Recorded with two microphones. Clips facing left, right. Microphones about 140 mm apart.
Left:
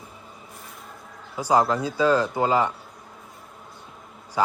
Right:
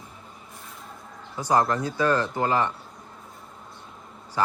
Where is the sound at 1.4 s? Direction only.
10° left (ahead or behind).